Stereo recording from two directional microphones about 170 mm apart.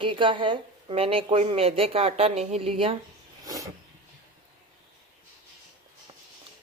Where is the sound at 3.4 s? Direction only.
20° right (ahead or behind).